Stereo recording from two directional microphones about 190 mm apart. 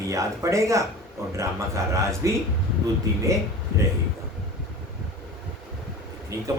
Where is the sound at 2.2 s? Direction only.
15° right (ahead or behind).